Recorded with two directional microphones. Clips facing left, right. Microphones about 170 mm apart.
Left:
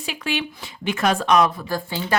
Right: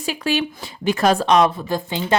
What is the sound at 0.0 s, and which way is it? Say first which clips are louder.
Speech: right 5 dB; 40° right (ahead or behind).